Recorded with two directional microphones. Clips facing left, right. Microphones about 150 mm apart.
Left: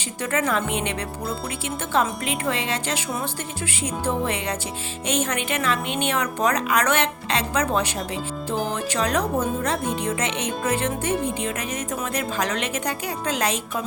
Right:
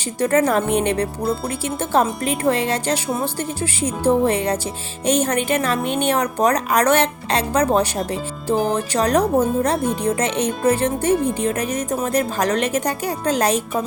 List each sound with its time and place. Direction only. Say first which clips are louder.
0.2 s speech: right 7 dB; 40° right (ahead or behind)